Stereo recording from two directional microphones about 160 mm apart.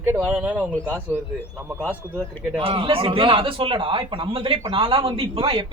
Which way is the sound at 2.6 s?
35° right (ahead or behind).